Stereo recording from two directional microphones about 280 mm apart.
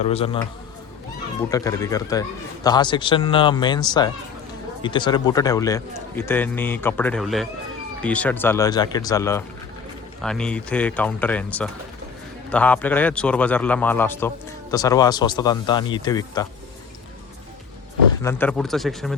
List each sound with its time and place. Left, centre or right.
0.0 s speech: left
1.5 s a man's voice: centre
12.5 s a man's voice: centre
18.2 s speech: centre